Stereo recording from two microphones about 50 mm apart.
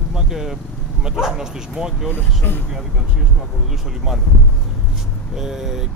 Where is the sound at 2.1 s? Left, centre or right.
Left.